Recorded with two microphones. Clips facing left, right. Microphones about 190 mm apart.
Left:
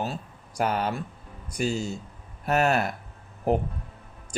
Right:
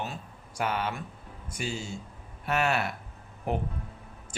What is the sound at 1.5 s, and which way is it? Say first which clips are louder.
Speech: left 7 dB; 40° left (ahead or behind).